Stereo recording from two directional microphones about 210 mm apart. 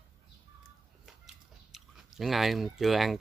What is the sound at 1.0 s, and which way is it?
Biting, centre (ahead or behind).